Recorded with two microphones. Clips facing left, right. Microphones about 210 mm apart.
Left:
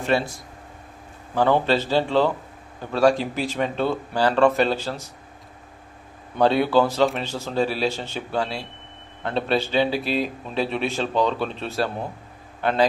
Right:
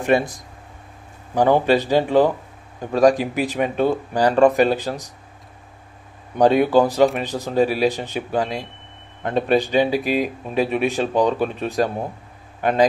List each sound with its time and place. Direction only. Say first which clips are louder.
0.0 s a man's voice: right 4 dB; 15° right (ahead or behind)
6.3 s a man's voice: right 3 dB; 15° right (ahead or behind)